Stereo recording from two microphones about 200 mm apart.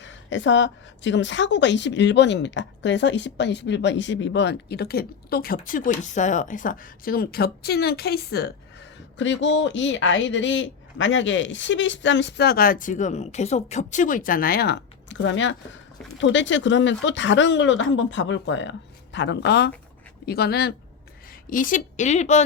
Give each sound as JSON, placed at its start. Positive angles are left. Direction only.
{"t": 0.0, "sound": "a woman's voice", "side_deg": 65}
{"t": 9.1, "sound": "a woman's voice", "side_deg": 65}
{"t": 21.5, "sound": "a woman's voice", "side_deg": 40}